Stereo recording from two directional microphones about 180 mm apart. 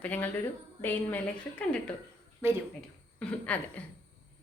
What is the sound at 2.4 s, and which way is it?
Speech, 15° right (ahead or behind).